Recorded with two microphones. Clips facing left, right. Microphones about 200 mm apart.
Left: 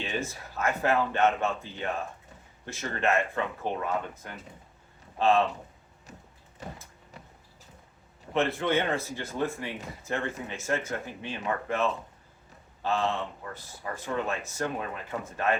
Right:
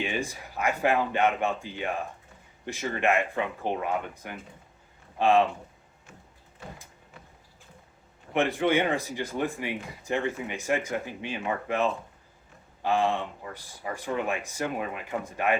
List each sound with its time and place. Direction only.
0.0 s speech: 15° right (ahead or behind)
6.1 s printer: 40° left (ahead or behind)
8.3 s speech: 15° right (ahead or behind)